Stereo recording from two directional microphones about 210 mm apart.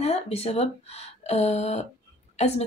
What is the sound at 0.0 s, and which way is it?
Speech, 30° left (ahead or behind).